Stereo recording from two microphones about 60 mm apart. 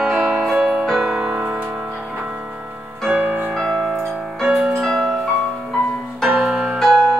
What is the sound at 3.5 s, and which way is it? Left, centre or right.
Music, centre.